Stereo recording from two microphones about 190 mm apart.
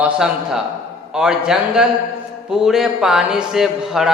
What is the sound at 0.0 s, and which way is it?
A man's voice, 5° right (ahead or behind).